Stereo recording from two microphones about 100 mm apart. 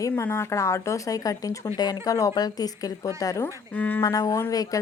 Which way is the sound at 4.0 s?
35° left (ahead or behind).